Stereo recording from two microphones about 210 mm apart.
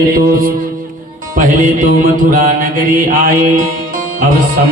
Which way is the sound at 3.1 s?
40° right (ahead or behind).